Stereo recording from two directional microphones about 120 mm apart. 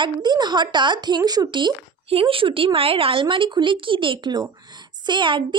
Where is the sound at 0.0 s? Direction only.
40° right (ahead or behind).